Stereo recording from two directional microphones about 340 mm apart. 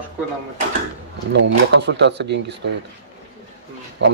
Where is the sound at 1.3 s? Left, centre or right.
Right.